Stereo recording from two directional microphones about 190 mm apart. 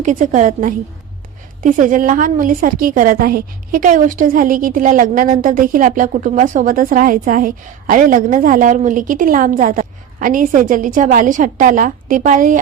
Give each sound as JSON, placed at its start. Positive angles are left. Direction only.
{"t": 0.0, "sound": "a woman's voice", "side_deg": -40}